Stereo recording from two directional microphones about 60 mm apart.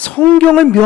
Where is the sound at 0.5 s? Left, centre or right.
Centre.